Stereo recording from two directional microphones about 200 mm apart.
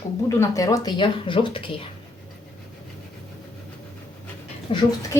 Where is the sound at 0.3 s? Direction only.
15° left (ahead or behind).